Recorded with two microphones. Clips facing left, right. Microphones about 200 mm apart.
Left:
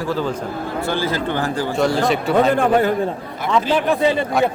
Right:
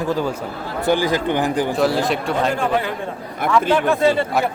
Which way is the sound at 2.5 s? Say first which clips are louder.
Left 5 dB; 50° left (ahead or behind).